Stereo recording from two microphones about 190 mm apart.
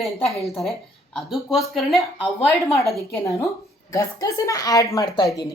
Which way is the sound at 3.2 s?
15° left (ahead or behind).